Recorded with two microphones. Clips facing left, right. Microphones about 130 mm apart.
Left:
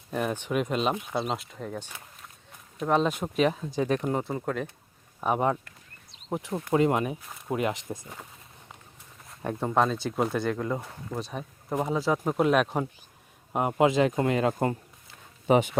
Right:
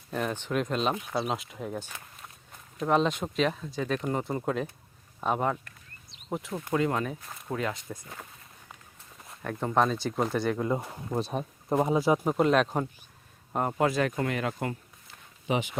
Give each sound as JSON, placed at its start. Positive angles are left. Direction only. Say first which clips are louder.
{"t": 0.1, "sound": "speech", "louder": "left 2 dB", "side_deg": 5}
{"t": 4.2, "sound": "speech", "louder": "even", "side_deg": 0}
{"t": 5.2, "sound": "speech", "louder": "left 2 dB", "side_deg": 10}
{"t": 9.6, "sound": "speech", "louder": "even", "side_deg": 5}
{"t": 10.7, "sound": "speech", "louder": "right 2 dB", "side_deg": -15}
{"t": 11.2, "sound": "speech", "louder": "right 6 dB", "side_deg": -30}
{"t": 11.8, "sound": "speech", "louder": "right 2 dB", "side_deg": -15}
{"t": 15.4, "sound": "speech", "louder": "left 7 dB", "side_deg": 45}